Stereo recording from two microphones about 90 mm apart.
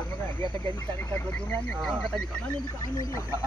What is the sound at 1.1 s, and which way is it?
Speech, 15° left (ahead or behind).